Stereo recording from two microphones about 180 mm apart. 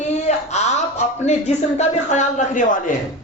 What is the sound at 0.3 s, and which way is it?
Speech, 40° left (ahead or behind).